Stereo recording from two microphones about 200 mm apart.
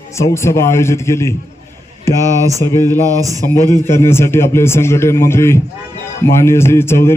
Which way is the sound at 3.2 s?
15° right (ahead or behind).